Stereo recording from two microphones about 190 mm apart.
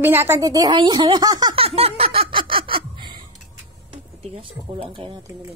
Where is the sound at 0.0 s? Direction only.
10° right (ahead or behind); by 2.4 s 30° right (ahead or behind).